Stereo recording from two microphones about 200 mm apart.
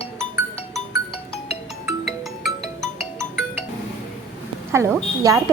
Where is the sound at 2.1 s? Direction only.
Centre (ahead or behind).